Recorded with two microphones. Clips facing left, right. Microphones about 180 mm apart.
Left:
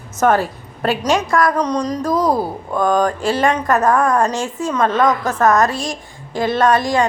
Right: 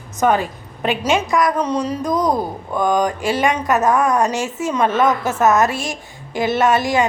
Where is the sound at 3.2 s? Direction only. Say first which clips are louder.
Left 1 dB; centre (ahead or behind).